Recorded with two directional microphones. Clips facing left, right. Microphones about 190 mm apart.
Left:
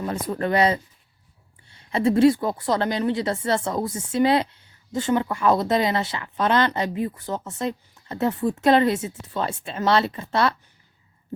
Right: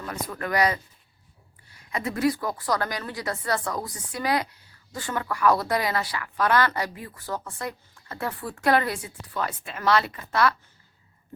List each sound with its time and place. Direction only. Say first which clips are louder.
0.0 s a woman's voice: left 7 dB; 30° left (ahead or behind)